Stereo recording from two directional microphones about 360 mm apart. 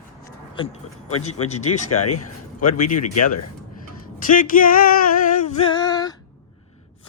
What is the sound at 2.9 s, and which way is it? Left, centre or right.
Speech, left.